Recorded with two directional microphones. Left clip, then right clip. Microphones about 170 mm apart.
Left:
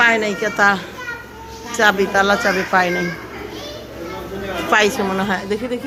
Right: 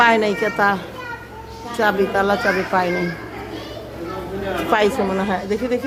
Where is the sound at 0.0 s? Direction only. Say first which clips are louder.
Even; 25° right (ahead or behind).